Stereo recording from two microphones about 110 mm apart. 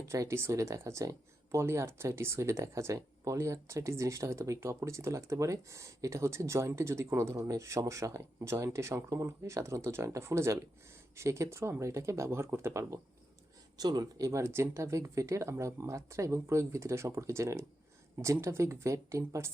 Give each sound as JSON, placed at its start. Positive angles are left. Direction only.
{"t": 0.1, "sound": "speech", "side_deg": -25}
{"t": 13.7, "sound": "speech", "side_deg": -35}